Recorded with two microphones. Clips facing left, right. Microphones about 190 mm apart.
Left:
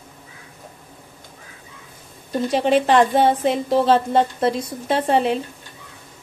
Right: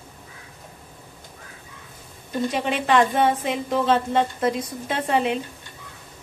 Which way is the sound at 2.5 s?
35° left (ahead or behind).